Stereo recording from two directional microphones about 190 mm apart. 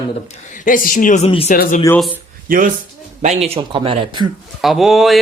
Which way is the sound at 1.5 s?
50° left (ahead or behind).